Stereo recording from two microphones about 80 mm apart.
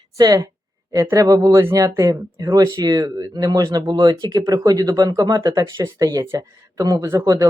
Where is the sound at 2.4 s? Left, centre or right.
Right.